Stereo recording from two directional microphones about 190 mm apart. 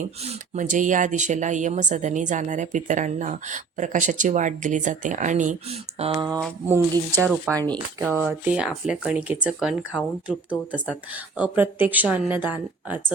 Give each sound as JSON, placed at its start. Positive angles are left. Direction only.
{"t": 0.3, "sound": "speech", "side_deg": -40}
{"t": 6.0, "sound": "speech", "side_deg": -25}
{"t": 7.3, "sound": "speech", "side_deg": 0}